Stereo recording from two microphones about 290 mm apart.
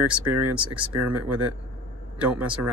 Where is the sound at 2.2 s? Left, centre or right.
Centre.